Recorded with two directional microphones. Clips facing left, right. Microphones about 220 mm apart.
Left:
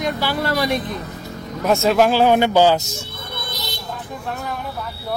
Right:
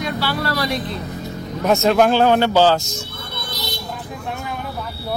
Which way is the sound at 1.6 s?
Centre (ahead or behind).